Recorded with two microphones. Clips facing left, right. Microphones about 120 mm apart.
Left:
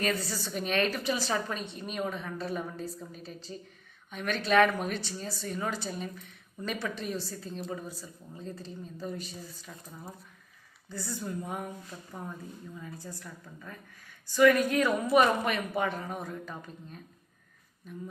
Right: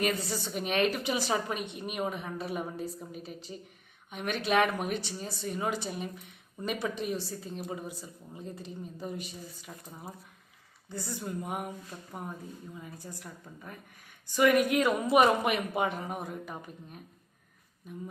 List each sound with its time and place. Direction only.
0.0 s speech: 20° right (ahead or behind)